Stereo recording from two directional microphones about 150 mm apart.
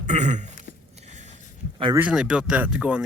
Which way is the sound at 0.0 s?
50° right (ahead or behind).